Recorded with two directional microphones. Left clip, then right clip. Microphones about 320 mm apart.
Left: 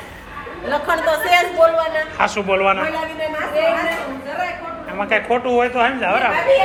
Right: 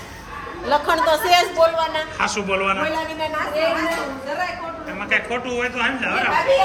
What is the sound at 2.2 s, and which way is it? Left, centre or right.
Speech, centre.